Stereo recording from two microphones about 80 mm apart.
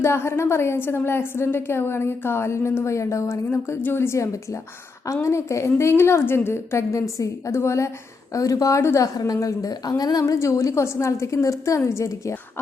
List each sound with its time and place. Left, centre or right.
0.0 s a woman's voice: left
8.3 s a woman's voice: left
9.1 s a woman's voice: left
10.4 s a woman's voice: left